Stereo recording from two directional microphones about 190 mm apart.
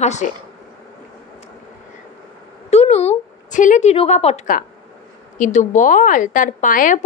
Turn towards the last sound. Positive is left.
turn(degrees=45)  # may be behind; listen again after turning